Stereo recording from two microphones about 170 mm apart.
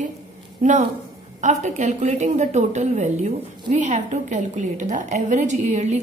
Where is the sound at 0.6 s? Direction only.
45° right (ahead or behind).